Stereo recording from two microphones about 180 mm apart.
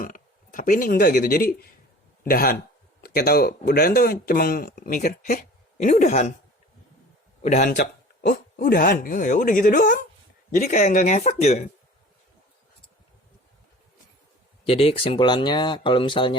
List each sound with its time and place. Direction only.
0.0 s speech: 50° left (ahead or behind)
7.4 s a man's voice: 40° left (ahead or behind)
8.3 s speech: 55° left (ahead or behind); by 11.7 s 40° left (ahead or behind)
14.7 s speech: 30° left (ahead or behind)